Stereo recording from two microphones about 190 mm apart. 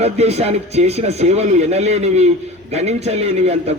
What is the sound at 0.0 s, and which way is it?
A man's voice, 35° right (ahead or behind).